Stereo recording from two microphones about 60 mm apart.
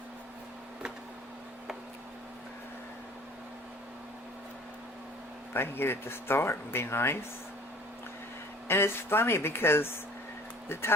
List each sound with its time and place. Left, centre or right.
5.5 s speech: left
8.6 s speech: left